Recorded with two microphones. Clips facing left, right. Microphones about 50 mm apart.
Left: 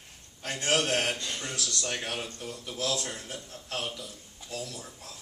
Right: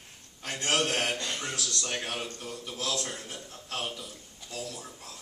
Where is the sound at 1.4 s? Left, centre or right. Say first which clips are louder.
Even; centre.